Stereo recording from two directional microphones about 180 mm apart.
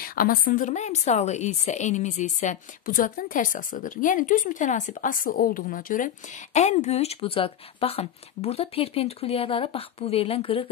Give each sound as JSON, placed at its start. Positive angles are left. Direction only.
{"t": 0.0, "sound": "speech", "side_deg": 55}